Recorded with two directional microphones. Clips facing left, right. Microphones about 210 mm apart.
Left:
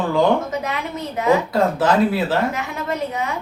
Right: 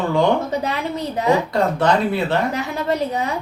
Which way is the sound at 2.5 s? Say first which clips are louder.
Right 3 dB; 35° right (ahead or behind).